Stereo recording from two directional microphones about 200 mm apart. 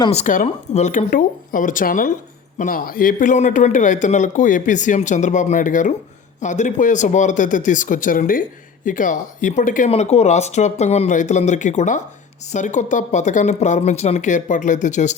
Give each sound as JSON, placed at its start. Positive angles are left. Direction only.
{"t": 0.1, "sound": "speech", "side_deg": 35}